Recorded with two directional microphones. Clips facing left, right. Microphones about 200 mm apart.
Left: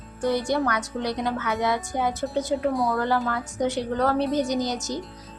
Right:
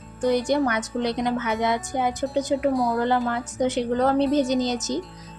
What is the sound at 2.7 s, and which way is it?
Speech, centre (ahead or behind).